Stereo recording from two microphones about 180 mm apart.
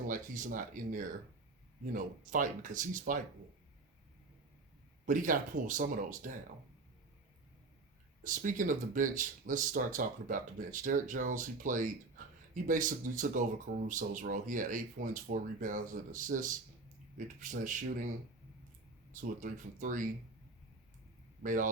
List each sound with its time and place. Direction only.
0.1 s speech: 45° right (ahead or behind)
5.0 s speech: 45° right (ahead or behind)
8.2 s speech: 45° right (ahead or behind)
19.1 s speech: 45° right (ahead or behind)
21.4 s speech: 45° right (ahead or behind)